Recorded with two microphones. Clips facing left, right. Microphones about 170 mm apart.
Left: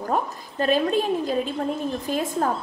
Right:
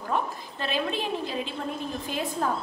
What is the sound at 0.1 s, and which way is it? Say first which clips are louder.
A woman's voice: left 2 dB; 45° left (ahead or behind).